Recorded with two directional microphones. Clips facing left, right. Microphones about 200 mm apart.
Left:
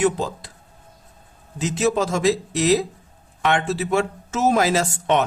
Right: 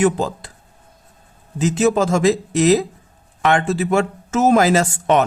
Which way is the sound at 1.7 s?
50° right (ahead or behind).